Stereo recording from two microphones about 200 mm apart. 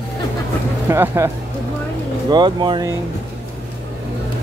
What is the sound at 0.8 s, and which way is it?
Speech, 10° right (ahead or behind).